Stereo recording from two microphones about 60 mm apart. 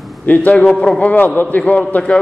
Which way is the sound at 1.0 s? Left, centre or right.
Left.